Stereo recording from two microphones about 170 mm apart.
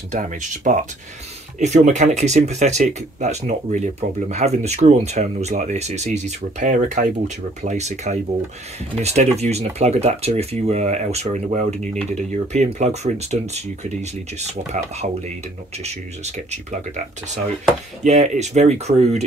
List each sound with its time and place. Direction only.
0.1 s speech: 45° right (ahead or behind)